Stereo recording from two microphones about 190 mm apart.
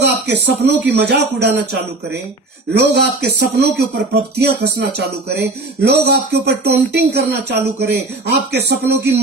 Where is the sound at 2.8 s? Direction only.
60° right (ahead or behind).